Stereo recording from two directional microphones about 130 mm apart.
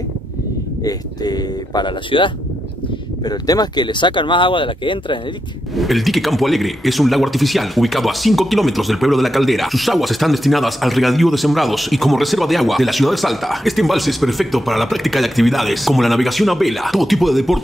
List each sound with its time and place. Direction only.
0.8 s speech: 30° left (ahead or behind)
5.8 s speech: centre (ahead or behind)